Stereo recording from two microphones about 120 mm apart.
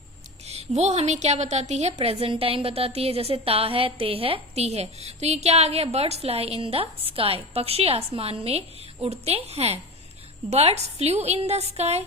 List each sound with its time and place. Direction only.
0.4 s a woman's voice: 65° right (ahead or behind)